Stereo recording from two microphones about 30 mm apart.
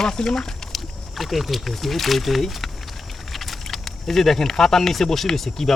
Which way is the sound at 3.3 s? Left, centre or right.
Centre.